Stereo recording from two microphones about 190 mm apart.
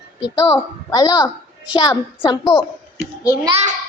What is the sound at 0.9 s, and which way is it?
A woman's voice, 20° left (ahead or behind).